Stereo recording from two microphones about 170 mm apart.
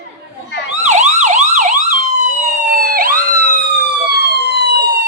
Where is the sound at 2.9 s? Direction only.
55° right (ahead or behind).